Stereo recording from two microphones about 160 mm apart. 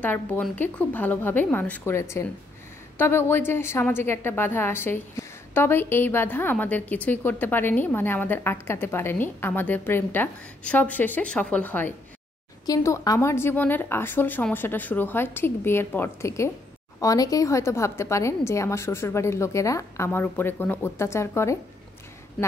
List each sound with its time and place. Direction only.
0.0 s a woman's voice: 10° left (ahead or behind)